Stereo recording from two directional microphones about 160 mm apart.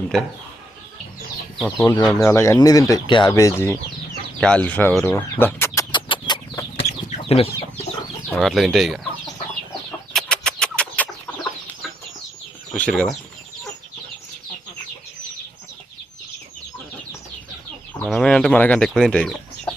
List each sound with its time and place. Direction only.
0.1 s speech: 5° left (ahead or behind)
1.9 s speech: 25° left (ahead or behind)
4.4 s speech: 5° left (ahead or behind)
5.9 s chicken: 30° left (ahead or behind)
8.4 s speech: centre (ahead or behind)
10.1 s chicken: 5° left (ahead or behind)
12.7 s speech: 5° left (ahead or behind)
18.0 s speech: 5° left (ahead or behind)